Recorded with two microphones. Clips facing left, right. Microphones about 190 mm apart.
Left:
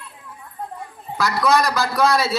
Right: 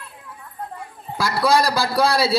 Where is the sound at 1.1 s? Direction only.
30° right (ahead or behind).